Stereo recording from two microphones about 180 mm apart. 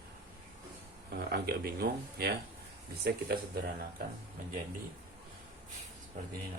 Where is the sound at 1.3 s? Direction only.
60° right (ahead or behind).